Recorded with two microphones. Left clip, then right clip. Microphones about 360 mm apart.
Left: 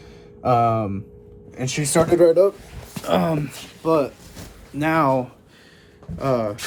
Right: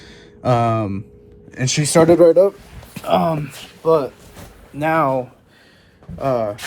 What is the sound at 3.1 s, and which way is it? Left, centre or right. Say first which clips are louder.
Speech: right 4 dB; centre.